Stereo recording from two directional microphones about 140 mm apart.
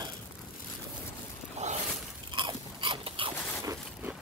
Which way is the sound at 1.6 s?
55° right (ahead or behind).